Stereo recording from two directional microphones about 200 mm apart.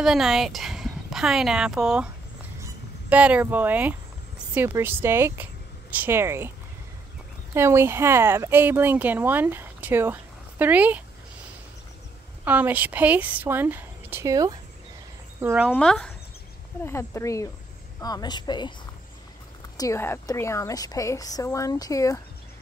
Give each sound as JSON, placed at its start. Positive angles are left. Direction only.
{"t": 0.0, "sound": "speech", "side_deg": 0}
{"t": 7.5, "sound": "speech", "side_deg": -10}
{"t": 12.4, "sound": "speech", "side_deg": -10}
{"t": 15.4, "sound": "a woman's voice", "side_deg": -5}
{"t": 19.8, "sound": "a woman's voice", "side_deg": 15}